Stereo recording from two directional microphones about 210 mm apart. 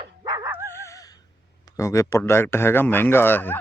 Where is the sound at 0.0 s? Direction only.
20° right (ahead or behind).